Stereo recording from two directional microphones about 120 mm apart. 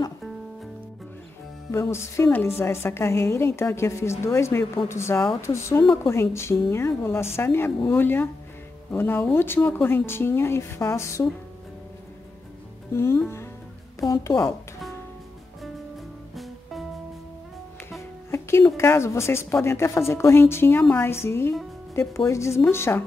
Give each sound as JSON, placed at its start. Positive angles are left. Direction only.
{"t": 1.7, "sound": "a woman's voice", "side_deg": 20}
{"t": 12.9, "sound": "a woman's voice", "side_deg": 20}
{"t": 18.3, "sound": "music", "side_deg": 20}
{"t": 18.8, "sound": "a woman's voice", "side_deg": 20}